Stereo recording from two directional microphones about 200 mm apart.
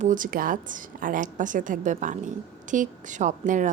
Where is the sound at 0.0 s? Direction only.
40° right (ahead or behind).